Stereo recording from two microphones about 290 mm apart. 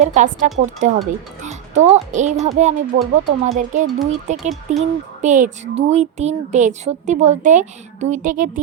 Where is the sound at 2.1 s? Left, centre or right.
Right.